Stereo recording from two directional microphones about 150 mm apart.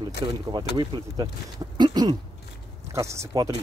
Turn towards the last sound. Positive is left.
turn(degrees=-20)  # may be behind; listen again after turning